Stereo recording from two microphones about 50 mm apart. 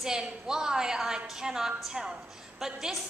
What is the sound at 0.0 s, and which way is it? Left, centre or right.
A woman's voice, centre.